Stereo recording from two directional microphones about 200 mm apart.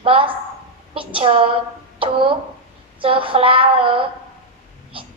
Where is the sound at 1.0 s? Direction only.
25° right (ahead or behind).